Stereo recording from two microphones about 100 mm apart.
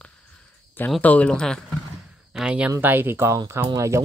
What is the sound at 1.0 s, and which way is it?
Speech, 15° left (ahead or behind).